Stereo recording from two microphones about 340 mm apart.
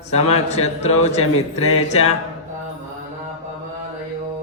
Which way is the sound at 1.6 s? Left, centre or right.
Left.